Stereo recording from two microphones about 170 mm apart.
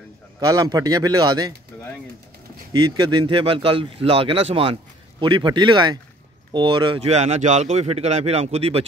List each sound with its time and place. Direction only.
0.5 s speech: 20° right (ahead or behind)
2.7 s speech: 25° right (ahead or behind)